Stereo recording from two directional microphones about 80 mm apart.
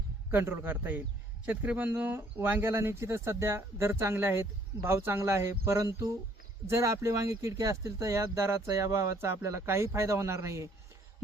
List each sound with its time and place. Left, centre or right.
0.3 s a man's voice: right